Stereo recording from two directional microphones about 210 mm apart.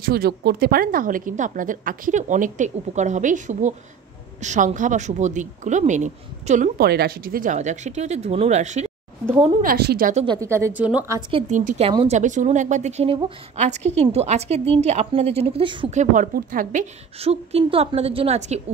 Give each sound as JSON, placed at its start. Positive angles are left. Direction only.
{"t": 0.0, "sound": "a woman's voice", "side_deg": -45}
{"t": 6.8, "sound": "a woman's voice", "side_deg": -50}
{"t": 9.6, "sound": "a woman's voice", "side_deg": -45}
{"t": 10.2, "sound": "a woman's voice", "side_deg": -15}
{"t": 11.1, "sound": "a woman's voice", "side_deg": -20}
{"t": 11.5, "sound": "a woman's voice", "side_deg": -35}